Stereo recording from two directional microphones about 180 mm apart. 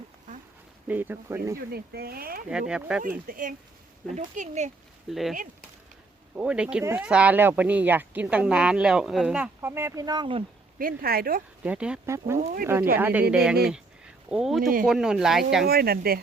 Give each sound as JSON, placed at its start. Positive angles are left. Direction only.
{"t": 0.9, "sound": "a woman's voice", "side_deg": -10}
{"t": 1.5, "sound": "speech", "side_deg": -60}
{"t": 2.5, "sound": "speech", "side_deg": -5}
{"t": 3.2, "sound": "speech", "side_deg": -50}
{"t": 4.1, "sound": "speech", "side_deg": -40}
{"t": 5.0, "sound": "speech", "side_deg": 0}
{"t": 6.3, "sound": "a woman's voice", "side_deg": -5}
{"t": 10.8, "sound": "speech", "side_deg": -55}
{"t": 11.6, "sound": "a woman's voice", "side_deg": -5}
{"t": 12.4, "sound": "speech", "side_deg": -50}
{"t": 12.6, "sound": "a woman's voice", "side_deg": -10}
{"t": 15.6, "sound": "speech", "side_deg": -55}